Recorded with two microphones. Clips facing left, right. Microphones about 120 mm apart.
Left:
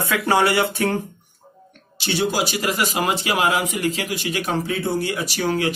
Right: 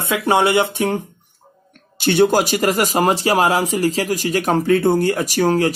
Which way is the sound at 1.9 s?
55° right (ahead or behind).